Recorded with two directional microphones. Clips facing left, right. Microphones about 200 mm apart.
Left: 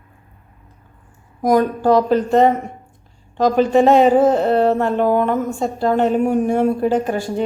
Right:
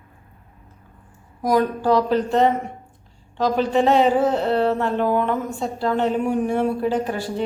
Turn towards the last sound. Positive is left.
turn(degrees=50)  # may be behind; listen again after turning